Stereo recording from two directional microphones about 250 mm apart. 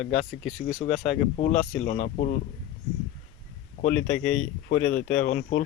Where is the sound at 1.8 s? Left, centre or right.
Left.